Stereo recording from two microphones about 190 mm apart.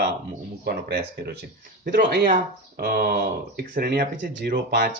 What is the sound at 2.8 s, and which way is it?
Speech, 55° right (ahead or behind).